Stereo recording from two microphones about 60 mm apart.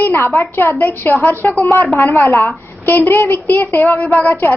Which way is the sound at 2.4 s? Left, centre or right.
Left.